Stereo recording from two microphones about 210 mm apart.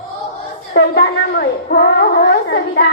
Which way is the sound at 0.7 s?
55° left (ahead or behind).